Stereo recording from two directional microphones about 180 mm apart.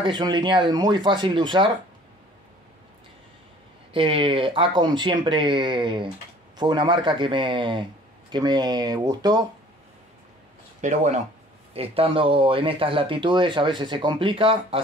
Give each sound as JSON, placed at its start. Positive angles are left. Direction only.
{"t": 0.0, "sound": "speech", "side_deg": -25}
{"t": 3.9, "sound": "speech", "side_deg": -30}
{"t": 10.8, "sound": "speech", "side_deg": -40}